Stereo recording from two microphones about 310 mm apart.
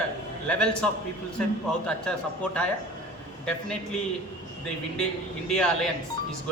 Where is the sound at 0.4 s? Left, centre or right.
Centre.